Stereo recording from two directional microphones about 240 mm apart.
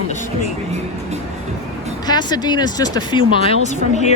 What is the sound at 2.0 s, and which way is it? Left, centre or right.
Speech, centre.